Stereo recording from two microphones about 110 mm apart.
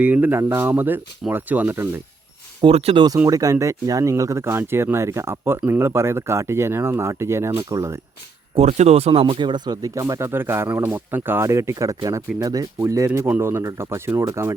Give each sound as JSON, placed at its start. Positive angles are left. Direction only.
{"t": 0.0, "sound": "speech", "side_deg": -15}
{"t": 2.6, "sound": "speech", "side_deg": -60}
{"t": 3.2, "sound": "speech", "side_deg": -30}
{"t": 8.5, "sound": "speech", "side_deg": -80}
{"t": 9.3, "sound": "speech", "side_deg": -45}